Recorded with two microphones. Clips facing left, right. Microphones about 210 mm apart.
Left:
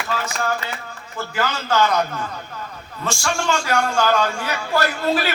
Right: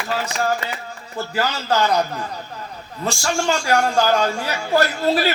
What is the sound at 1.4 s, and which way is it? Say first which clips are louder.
A man's voice: even; 35° right (ahead or behind).